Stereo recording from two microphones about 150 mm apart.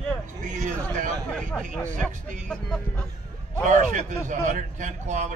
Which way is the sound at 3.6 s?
55° right (ahead or behind).